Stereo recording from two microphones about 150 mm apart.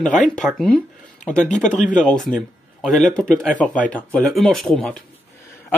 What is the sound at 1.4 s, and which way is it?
Speech, 55° left (ahead or behind).